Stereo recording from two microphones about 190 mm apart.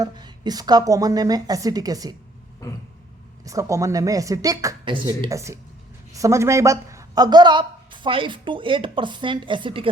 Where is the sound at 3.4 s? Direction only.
15° right (ahead or behind).